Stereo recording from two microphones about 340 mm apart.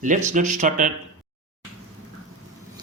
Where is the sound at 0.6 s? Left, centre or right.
Right.